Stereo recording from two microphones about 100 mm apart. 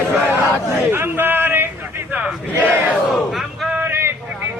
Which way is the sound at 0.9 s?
20° right (ahead or behind).